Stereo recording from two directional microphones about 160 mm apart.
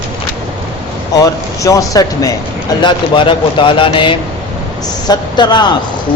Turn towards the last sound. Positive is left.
turn(degrees=30)  # may be behind; listen again after turning